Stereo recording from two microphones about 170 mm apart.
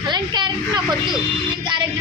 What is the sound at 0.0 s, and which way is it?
A woman's voice, 25° right (ahead or behind).